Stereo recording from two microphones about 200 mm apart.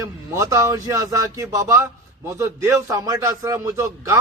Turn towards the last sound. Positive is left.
turn(degrees=-15)  # may be behind; listen again after turning